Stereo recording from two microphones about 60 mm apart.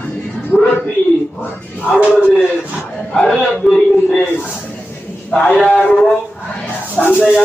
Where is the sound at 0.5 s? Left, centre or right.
Centre.